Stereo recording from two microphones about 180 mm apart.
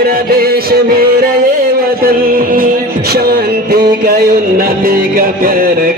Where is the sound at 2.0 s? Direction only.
50° right (ahead or behind).